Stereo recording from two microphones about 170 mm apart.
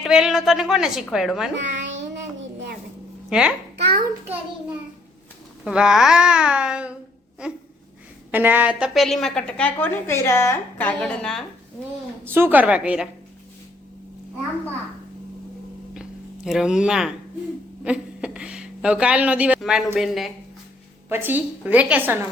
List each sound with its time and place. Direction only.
0.0 s a woman's voice: 5° right (ahead or behind)
1.5 s a child's voice: 90° right
3.2 s a child's voice: 5° right (ahead or behind)
5.6 s a woman's voice: 5° right (ahead or behind)
12.2 s a woman's voice: 15° right (ahead or behind)
16.0 s a sound: centre (ahead or behind)
17.8 s speech: 5° right (ahead or behind)
21.1 s a woman's voice: 10° right (ahead or behind)